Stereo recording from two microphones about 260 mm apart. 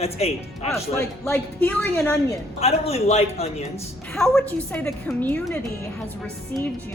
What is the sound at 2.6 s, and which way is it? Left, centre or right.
Speech, left.